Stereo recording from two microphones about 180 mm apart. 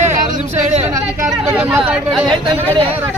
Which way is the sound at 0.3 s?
40° right (ahead or behind).